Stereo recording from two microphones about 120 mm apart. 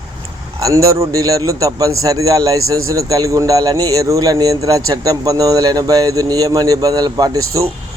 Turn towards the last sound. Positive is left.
turn(degrees=-25)  # may be behind; listen again after turning